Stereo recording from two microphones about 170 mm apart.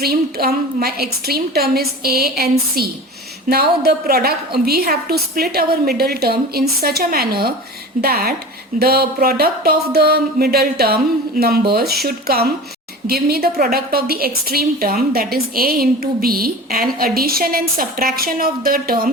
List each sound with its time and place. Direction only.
0.0 s a woman's voice: 60° right (ahead or behind)